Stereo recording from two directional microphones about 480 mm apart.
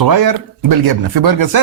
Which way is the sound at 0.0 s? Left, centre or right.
Right.